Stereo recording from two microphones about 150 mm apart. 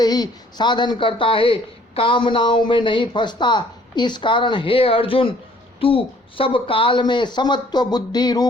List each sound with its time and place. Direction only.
0.0 s speech: 25° left (ahead or behind)